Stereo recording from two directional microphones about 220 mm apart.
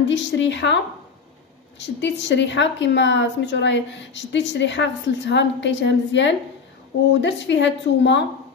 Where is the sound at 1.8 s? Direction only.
50° left (ahead or behind).